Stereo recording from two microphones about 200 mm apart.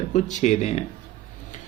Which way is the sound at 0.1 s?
35° left (ahead or behind).